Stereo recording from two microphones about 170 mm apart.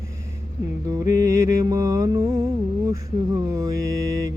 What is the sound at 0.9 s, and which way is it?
Music, 20° right (ahead or behind).